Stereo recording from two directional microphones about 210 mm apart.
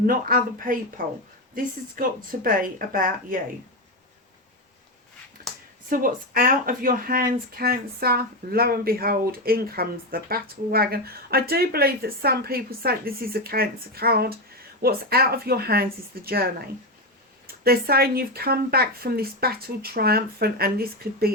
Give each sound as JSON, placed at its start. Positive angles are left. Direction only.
{"t": 0.0, "sound": "speech", "side_deg": -45}
{"t": 5.5, "sound": "a sound", "side_deg": 0}
{"t": 5.9, "sound": "speech", "side_deg": -40}